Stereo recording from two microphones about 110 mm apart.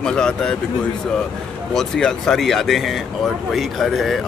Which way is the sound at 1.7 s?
5° left (ahead or behind).